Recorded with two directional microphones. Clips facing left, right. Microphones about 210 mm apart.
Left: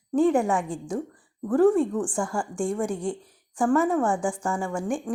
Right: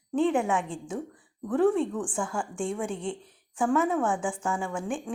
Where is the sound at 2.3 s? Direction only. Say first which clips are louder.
Left 5 dB; 10° left (ahead or behind).